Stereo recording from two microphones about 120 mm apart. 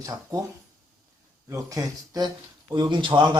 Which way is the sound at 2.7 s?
40° right (ahead or behind).